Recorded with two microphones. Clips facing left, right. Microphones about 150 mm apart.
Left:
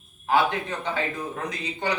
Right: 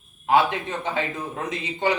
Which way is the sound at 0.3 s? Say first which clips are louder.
Right 2 dB; 20° right (ahead or behind).